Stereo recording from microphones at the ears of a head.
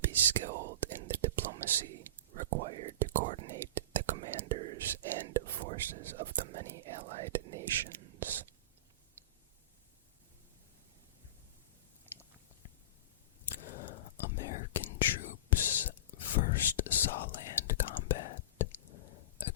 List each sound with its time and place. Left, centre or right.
0.0 s whispering: right
13.4 s whispering: left